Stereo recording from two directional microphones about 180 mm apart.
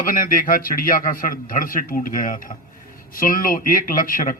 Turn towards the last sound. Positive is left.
turn(degrees=50)  # may be behind; listen again after turning